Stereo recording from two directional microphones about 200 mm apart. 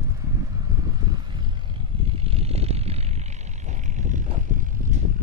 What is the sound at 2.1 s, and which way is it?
Vehicle, 30° right (ahead or behind).